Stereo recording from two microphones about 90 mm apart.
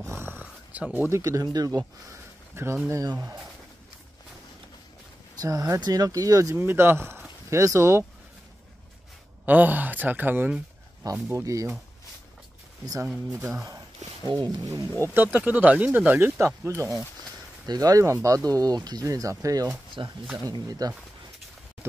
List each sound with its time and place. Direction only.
0.0 s a sound: 30° right (ahead or behind)
1.1 s speech: 40° right (ahead or behind)
2.5 s speech: 30° right (ahead or behind)
5.4 s speech: 45° right (ahead or behind)
6.6 s speech: 25° right (ahead or behind)
9.5 s speech: 20° right (ahead or behind)
11.2 s speech: 35° right (ahead or behind)
13.3 s speech: 25° right (ahead or behind)
14.2 s speech: 55° right (ahead or behind)
15.0 s speech: 25° left (ahead or behind)
15.3 s speech: 15° right (ahead or behind); by 19.7 s 40° right (ahead or behind)
20.0 s speech: 55° right (ahead or behind)
20.4 s speech: 45° right (ahead or behind)